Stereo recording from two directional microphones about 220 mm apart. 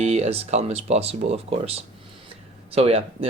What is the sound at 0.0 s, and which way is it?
Speech, 30° right (ahead or behind).